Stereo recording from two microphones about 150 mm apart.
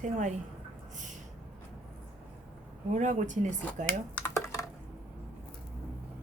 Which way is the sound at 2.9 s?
55° right (ahead or behind).